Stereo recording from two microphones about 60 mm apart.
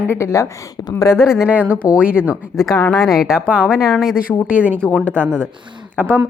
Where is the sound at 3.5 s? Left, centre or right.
Right.